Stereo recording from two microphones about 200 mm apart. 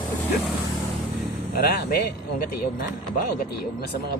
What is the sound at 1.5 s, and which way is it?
Speech, 50° left (ahead or behind).